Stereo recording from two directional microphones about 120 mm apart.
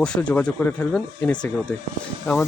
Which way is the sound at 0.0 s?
10° left (ahead or behind).